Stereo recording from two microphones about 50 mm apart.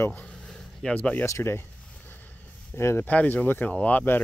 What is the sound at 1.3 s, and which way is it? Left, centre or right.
Speech, left.